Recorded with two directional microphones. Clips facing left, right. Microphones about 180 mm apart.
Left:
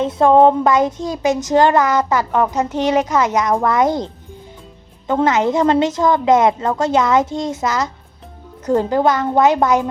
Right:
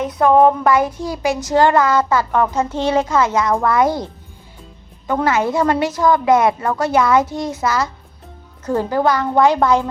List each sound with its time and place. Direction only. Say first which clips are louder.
0.0 s a child's voice: left 1 dB; 25° left (ahead or behind)